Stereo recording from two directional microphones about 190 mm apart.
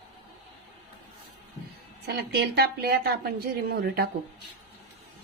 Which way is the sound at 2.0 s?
60° right (ahead or behind).